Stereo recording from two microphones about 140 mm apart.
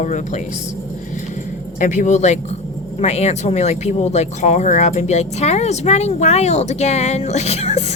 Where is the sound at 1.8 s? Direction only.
60° left (ahead or behind).